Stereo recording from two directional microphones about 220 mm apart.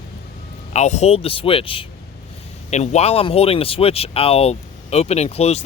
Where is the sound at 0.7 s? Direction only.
30° left (ahead or behind).